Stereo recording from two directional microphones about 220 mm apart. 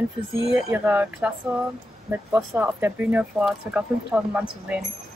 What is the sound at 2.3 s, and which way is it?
Speech, 10° right (ahead or behind).